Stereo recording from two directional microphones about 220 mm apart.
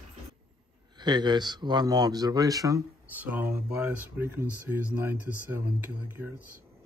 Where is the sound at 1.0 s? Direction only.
20° right (ahead or behind).